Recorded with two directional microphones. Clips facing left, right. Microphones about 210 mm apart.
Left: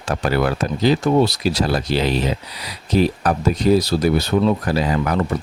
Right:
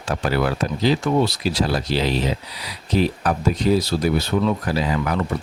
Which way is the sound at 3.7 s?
40° left (ahead or behind).